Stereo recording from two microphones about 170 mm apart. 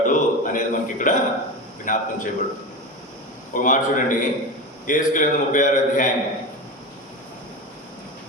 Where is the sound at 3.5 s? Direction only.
50° left (ahead or behind).